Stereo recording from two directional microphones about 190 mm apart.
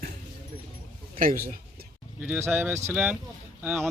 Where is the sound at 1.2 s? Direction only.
45° right (ahead or behind).